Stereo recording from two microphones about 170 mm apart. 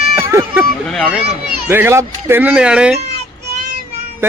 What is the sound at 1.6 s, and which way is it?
Speech, 15° right (ahead or behind).